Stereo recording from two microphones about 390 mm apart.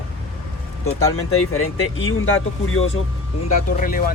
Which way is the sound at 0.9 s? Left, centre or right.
Left.